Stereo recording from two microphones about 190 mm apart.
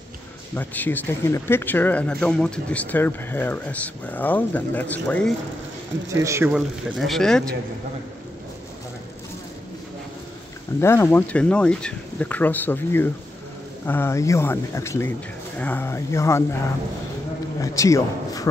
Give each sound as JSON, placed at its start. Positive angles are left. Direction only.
{"t": 0.6, "sound": "speech", "side_deg": 10}
{"t": 6.0, "sound": "speech", "side_deg": -15}
{"t": 6.5, "sound": "speech", "side_deg": 0}
{"t": 10.8, "sound": "speech", "side_deg": 15}
{"t": 17.6, "sound": "a man's voice", "side_deg": 15}